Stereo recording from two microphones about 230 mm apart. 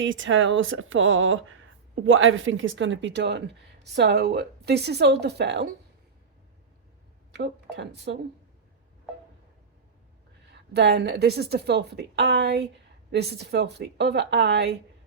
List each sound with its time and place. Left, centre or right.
0.0 s a woman's voice: right
7.8 s a woman's voice: right
10.8 s a woman's voice: right